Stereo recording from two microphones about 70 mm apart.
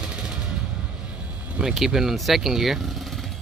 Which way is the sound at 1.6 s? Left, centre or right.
Centre.